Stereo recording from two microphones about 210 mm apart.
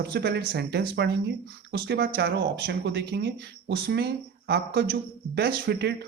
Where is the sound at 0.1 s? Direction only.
50° right (ahead or behind).